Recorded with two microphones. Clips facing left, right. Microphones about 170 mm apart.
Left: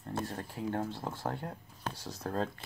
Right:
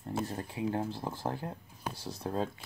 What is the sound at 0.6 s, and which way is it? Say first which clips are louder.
Speech: right 2 dB; 10° right (ahead or behind).